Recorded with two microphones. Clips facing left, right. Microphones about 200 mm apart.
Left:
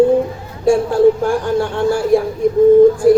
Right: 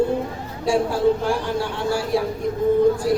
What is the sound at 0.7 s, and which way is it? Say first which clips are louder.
Speech: left 7 dB; 50° left (ahead or behind).